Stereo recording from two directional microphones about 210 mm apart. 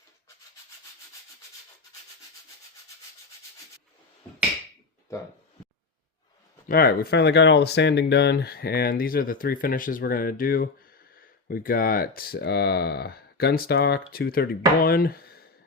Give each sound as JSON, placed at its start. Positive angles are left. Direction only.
{"t": 6.7, "sound": "speech", "side_deg": 45}